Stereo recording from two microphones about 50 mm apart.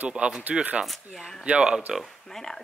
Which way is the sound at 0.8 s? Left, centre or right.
Centre.